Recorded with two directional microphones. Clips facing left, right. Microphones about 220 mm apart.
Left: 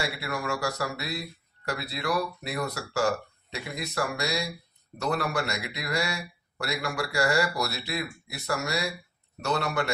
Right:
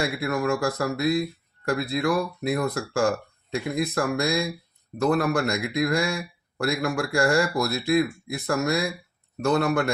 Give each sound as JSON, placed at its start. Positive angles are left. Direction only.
{"t": 0.0, "sound": "speech", "side_deg": -50}